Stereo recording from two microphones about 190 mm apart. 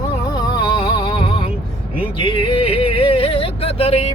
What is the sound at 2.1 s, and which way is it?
Yodeling, 25° left (ahead or behind).